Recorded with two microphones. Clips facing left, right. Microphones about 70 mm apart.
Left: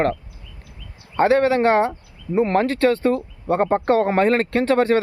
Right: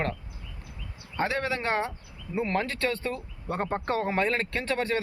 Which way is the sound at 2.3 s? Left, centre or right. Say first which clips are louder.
Left 10 dB; left.